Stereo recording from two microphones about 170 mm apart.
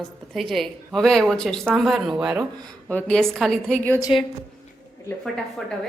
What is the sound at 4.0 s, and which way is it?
Speech, 25° left (ahead or behind).